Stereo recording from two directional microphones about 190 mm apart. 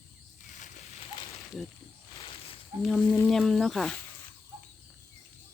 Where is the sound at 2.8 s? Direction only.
Centre (ahead or behind).